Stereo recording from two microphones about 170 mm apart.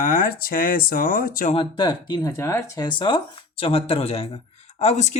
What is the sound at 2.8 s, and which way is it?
Speech, 30° left (ahead or behind).